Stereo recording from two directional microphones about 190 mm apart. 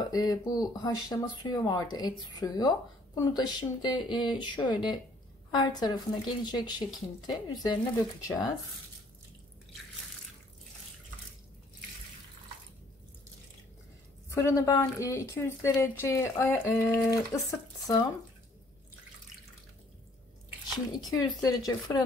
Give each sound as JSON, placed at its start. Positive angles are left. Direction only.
{"t": 0.0, "sound": "speech", "side_deg": 20}
{"t": 14.3, "sound": "a woman's voice", "side_deg": 15}
{"t": 20.7, "sound": "speech", "side_deg": 20}